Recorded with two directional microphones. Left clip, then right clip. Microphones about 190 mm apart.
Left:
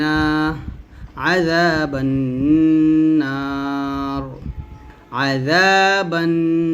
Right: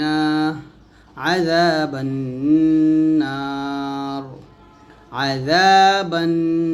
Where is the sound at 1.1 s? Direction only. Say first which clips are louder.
Left 1 dB; 10° left (ahead or behind).